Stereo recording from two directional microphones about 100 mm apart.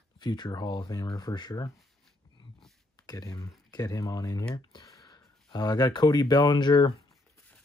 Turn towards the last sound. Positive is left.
turn(degrees=45)  # may be behind; listen again after turning